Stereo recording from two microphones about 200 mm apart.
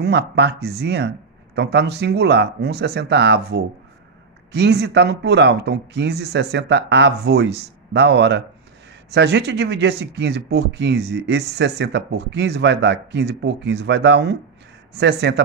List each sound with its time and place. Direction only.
0.0 s speech: 55° right (ahead or behind)